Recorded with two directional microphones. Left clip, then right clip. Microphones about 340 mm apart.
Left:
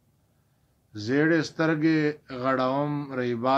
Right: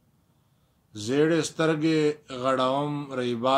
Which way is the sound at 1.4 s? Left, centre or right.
Centre.